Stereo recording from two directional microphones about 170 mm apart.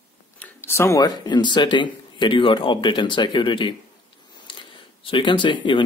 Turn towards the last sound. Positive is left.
turn(degrees=30)  # may be behind; listen again after turning